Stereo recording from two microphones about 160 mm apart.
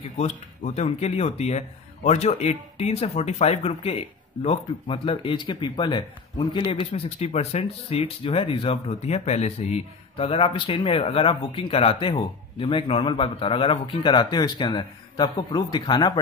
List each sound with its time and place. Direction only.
0.2 s speech: 45° left (ahead or behind); by 16.2 s 25° left (ahead or behind)